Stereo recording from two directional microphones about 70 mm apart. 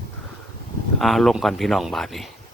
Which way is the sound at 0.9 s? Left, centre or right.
Centre.